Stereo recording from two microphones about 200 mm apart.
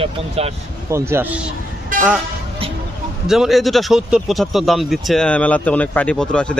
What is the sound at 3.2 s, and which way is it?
Speech, centre (ahead or behind).